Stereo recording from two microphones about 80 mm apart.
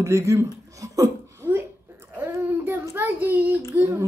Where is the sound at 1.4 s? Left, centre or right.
Right.